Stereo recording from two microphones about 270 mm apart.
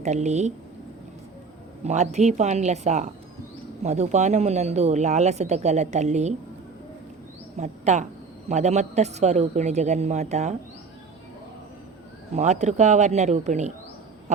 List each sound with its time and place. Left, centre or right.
0.0 s speech: right
1.8 s speech: right
7.6 s a woman's voice: right
12.3 s speech: right
14.3 s owl: right